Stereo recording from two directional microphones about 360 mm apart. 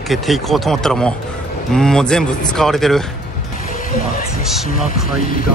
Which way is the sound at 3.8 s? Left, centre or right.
Left.